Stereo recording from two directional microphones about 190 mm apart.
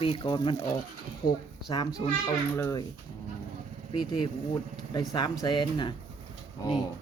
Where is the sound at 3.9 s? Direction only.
25° left (ahead or behind).